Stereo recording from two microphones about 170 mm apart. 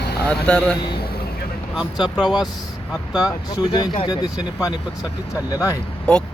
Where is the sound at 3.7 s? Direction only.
25° left (ahead or behind).